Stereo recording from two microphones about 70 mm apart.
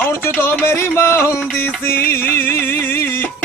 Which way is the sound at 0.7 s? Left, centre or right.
Left.